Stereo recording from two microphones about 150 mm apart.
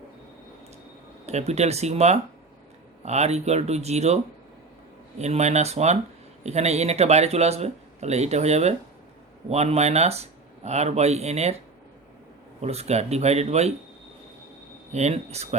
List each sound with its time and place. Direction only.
1.3 s speech: 45° right (ahead or behind)
12.6 s speech: 45° right (ahead or behind)
14.9 s speech: 45° right (ahead or behind)